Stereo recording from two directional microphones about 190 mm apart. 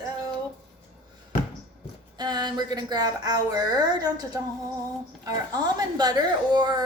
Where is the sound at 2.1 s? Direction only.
20° right (ahead or behind).